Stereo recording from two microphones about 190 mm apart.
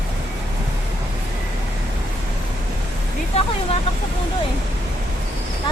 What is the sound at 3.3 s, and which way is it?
Vehicle, 35° left (ahead or behind).